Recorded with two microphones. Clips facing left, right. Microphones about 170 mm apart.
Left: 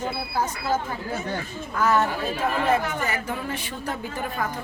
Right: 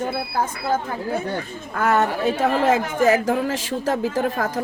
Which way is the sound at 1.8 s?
65° right (ahead or behind).